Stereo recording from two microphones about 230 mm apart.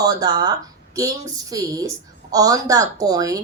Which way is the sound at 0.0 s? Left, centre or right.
Centre.